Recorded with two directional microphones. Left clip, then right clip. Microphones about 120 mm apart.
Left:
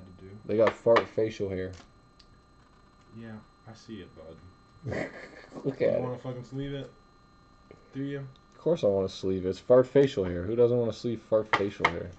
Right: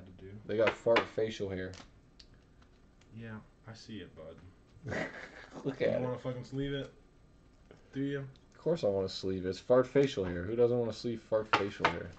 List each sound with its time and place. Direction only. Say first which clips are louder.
0.5 s speech: left 6 dB; 10° left (ahead or behind)
3.2 s speech: left 2 dB; centre (ahead or behind)
4.8 s speech: left 3 dB; 20° left (ahead or behind)
6.1 s speech: left 1 dB; 5° right (ahead or behind)
7.9 s speech: left 1 dB; centre (ahead or behind)